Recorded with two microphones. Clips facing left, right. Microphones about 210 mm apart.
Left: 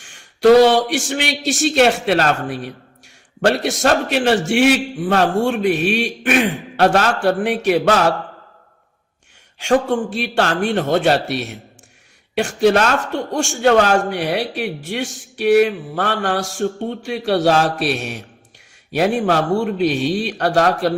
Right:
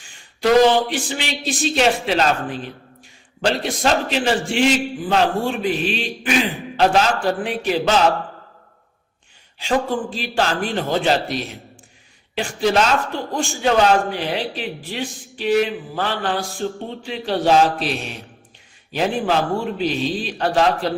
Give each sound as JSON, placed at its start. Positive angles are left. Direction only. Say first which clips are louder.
{"t": 0.0, "sound": "a sound", "louder": "left 3 dB", "side_deg": 75}
{"t": 0.7, "sound": "a man's voice", "louder": "left 2 dB", "side_deg": 75}
{"t": 9.9, "sound": "a man's voice", "louder": "left 4 dB", "side_deg": 70}